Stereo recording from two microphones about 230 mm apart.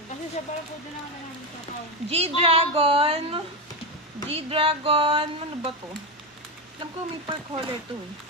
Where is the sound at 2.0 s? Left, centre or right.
Right.